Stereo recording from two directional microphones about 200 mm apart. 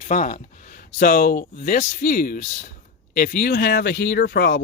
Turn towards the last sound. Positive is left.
turn(degrees=55)  # may be behind; listen again after turning